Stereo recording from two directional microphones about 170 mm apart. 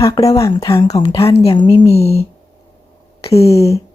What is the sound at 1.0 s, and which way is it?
A woman's voice, 35° left (ahead or behind).